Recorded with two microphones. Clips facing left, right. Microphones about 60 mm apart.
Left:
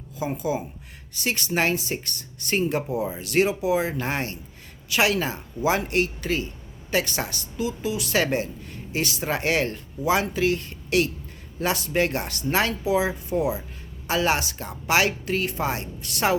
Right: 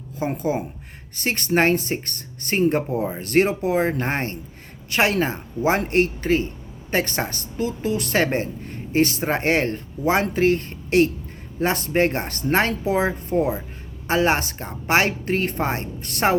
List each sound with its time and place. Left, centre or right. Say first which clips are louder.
0.2 s speech: right 3 dB; right